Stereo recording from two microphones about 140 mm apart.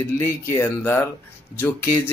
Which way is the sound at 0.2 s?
20° left (ahead or behind).